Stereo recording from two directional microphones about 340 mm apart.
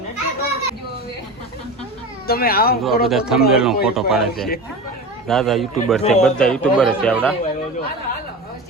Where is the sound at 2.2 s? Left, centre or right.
Left.